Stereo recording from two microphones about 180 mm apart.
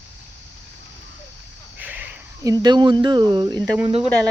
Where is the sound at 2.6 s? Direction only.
25° right (ahead or behind).